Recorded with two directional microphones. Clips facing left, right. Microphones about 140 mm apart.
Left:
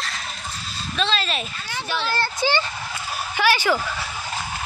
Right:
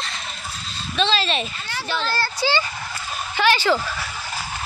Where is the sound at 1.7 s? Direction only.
15° left (ahead or behind).